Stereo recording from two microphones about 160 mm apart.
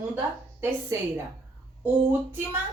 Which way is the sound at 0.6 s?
15° right (ahead or behind).